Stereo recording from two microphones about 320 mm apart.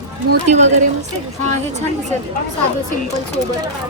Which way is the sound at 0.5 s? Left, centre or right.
Right.